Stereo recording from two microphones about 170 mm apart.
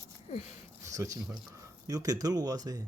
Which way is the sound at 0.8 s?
20° right (ahead or behind).